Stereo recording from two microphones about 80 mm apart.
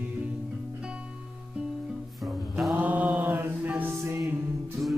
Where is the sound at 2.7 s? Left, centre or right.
Centre.